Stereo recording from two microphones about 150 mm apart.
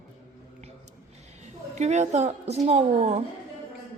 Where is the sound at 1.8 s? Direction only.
50° right (ahead or behind).